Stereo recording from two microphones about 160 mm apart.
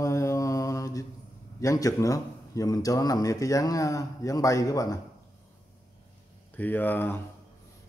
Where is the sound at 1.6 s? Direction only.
20° left (ahead or behind).